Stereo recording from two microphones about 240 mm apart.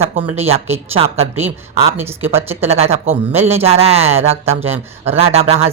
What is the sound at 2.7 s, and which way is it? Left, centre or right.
Speech, right.